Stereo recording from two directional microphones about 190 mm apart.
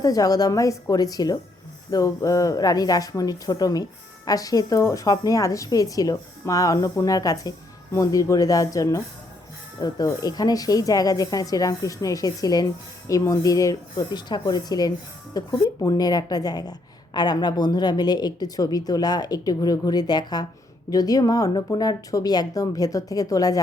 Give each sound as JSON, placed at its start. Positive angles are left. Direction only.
{"t": 0.0, "sound": "speech", "side_deg": 20}